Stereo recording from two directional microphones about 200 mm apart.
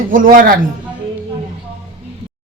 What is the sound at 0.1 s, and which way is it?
Speech, 45° right (ahead or behind).